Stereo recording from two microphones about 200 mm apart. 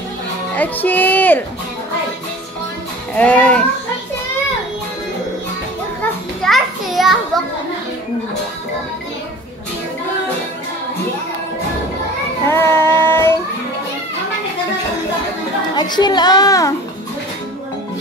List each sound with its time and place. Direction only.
0.6 s speech: 10° left (ahead or behind)
3.2 s speech: 5° left (ahead or behind)
6.4 s children playing: centre (ahead or behind)
12.4 s child singing: 10° left (ahead or behind)
15.7 s a child's voice: 20° left (ahead or behind)